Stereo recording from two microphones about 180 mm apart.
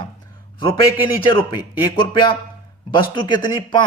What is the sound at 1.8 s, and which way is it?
Speech, 25° left (ahead or behind).